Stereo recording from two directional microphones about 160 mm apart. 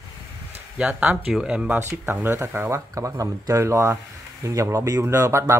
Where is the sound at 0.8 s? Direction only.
5° right (ahead or behind).